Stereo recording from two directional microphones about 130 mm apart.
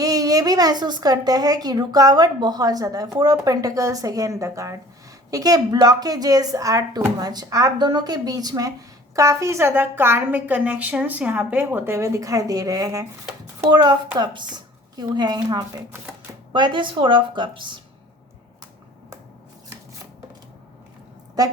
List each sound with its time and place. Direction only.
0.0 s a woman's voice: 30° right (ahead or behind)
21.4 s speech: 30° right (ahead or behind)